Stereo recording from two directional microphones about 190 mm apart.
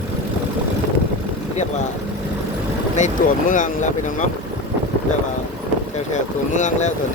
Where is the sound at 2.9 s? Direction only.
40° left (ahead or behind).